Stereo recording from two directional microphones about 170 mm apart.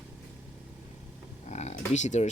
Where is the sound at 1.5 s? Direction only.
40° left (ahead or behind).